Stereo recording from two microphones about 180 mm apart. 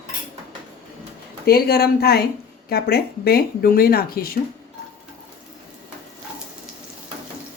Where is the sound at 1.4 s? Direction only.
60° left (ahead or behind).